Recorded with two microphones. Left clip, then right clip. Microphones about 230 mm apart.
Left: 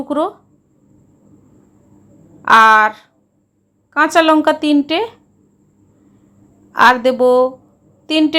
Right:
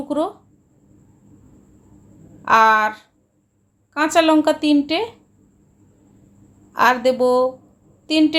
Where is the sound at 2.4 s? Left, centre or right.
Centre.